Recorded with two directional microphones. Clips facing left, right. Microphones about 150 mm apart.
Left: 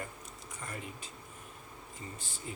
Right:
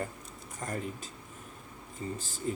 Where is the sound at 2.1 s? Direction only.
40° right (ahead or behind).